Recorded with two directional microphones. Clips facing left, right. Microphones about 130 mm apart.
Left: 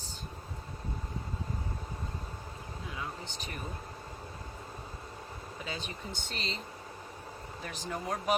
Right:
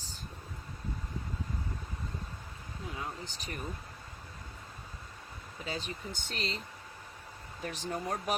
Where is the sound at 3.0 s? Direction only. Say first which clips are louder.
Left 2 dB; 40° right (ahead or behind).